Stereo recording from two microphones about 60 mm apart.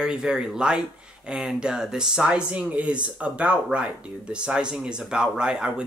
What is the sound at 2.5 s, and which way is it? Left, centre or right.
Speech, right.